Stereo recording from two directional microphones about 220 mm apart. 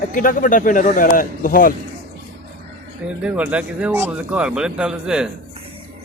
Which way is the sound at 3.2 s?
5° right (ahead or behind).